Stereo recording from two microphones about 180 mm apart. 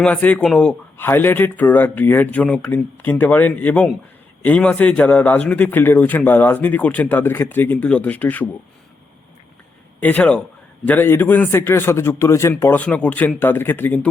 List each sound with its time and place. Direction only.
0.0 s a man's voice: 10° left (ahead or behind)
10.0 s a man's voice: 10° left (ahead or behind)